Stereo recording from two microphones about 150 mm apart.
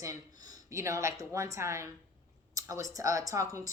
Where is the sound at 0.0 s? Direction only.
25° right (ahead or behind).